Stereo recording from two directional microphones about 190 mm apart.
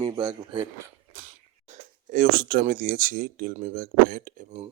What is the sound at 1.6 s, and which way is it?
Speech, 50° right (ahead or behind).